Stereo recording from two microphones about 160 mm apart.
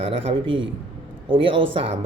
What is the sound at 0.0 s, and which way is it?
Speech, 35° right (ahead or behind).